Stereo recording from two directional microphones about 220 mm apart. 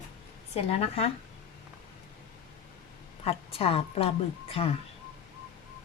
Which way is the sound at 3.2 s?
25° left (ahead or behind).